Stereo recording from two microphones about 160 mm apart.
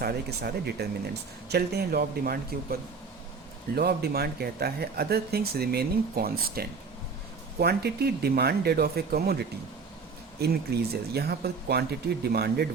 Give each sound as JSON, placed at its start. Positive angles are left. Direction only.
{"t": 0.0, "sound": "speech", "side_deg": -85}
{"t": 3.8, "sound": "speech", "side_deg": -80}
{"t": 7.6, "sound": "speech", "side_deg": -85}
{"t": 10.4, "sound": "speech", "side_deg": -80}